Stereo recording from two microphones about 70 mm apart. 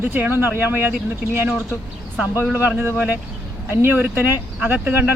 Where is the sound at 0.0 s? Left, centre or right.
Right.